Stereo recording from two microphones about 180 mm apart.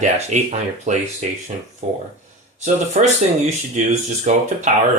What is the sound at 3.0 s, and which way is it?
Speech, 40° right (ahead or behind).